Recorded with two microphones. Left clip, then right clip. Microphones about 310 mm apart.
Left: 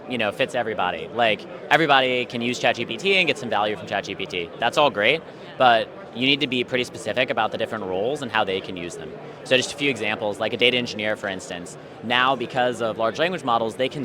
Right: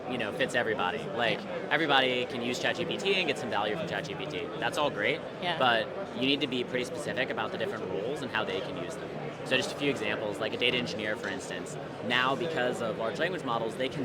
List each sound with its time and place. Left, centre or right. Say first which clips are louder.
0.1 s a man's voice: left 9 dB; left
0.5 s a man's voice: left 5 dB; left